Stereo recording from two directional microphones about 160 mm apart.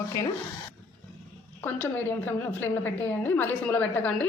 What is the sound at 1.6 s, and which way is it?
A woman's voice, 10° left (ahead or behind).